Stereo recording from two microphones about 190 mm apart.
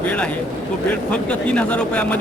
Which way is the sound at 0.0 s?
5° left (ahead or behind).